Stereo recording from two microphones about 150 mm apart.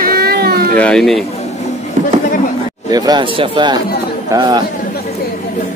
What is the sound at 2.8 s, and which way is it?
Speech, 25° right (ahead or behind).